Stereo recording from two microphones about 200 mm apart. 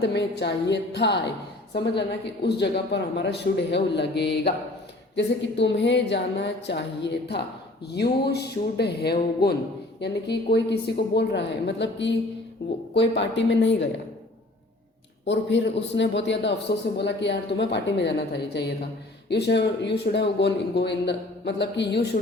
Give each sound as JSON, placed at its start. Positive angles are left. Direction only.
{"t": 0.0, "sound": "a man's voice", "side_deg": 60}
{"t": 15.3, "sound": "a man's voice", "side_deg": 60}